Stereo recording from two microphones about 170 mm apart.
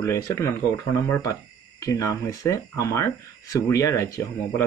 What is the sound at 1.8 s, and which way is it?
Speech, 20° left (ahead or behind).